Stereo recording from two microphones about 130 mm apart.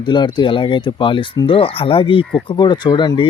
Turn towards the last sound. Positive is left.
turn(degrees=35)  # may be behind; listen again after turning